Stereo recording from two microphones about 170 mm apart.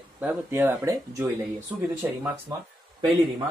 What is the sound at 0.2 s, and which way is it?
Speech, 15° right (ahead or behind).